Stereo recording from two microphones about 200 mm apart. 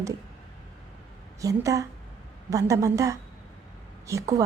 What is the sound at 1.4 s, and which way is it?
A woman's voice, 15° right (ahead or behind).